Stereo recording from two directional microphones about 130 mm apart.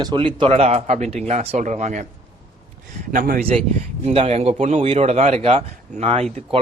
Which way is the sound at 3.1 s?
90° right.